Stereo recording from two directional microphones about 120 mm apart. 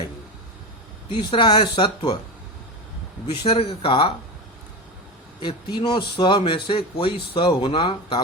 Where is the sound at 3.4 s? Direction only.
55° left (ahead or behind).